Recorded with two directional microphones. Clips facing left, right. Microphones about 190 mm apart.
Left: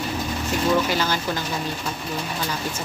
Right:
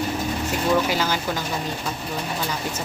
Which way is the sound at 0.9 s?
10° right (ahead or behind).